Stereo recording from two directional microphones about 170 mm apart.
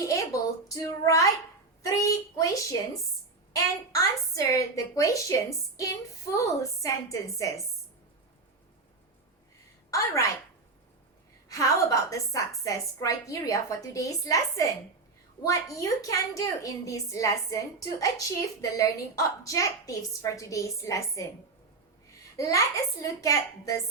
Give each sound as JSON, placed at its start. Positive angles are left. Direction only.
{"t": 0.0, "sound": "a sound", "side_deg": 20}
{"t": 0.7, "sound": "a woman's voice", "side_deg": 20}
{"t": 11.4, "sound": "a woman's voice", "side_deg": 20}
{"t": 22.4, "sound": "a woman's voice", "side_deg": 20}